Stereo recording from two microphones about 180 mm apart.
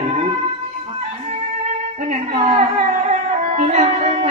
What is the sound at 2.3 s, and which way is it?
Music, 35° right (ahead or behind).